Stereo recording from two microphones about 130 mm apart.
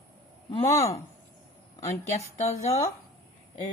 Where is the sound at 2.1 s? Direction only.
55° left (ahead or behind).